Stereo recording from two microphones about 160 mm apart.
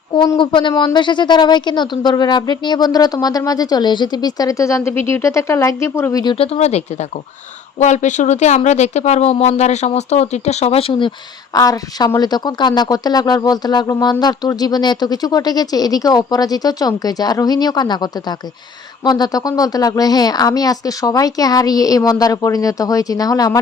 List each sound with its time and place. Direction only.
0.1 s speech: 30° left (ahead or behind)
6.3 s speech: 40° left (ahead or behind)
11.5 s speech: 25° left (ahead or behind)